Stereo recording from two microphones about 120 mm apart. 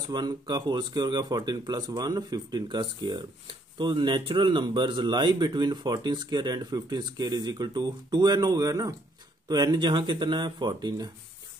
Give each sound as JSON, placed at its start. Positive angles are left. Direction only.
{"t": 0.1, "sound": "speech", "side_deg": -35}